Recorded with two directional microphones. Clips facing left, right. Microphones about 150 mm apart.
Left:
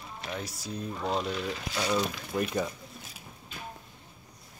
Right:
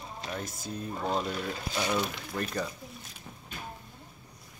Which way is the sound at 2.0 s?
10° left (ahead or behind).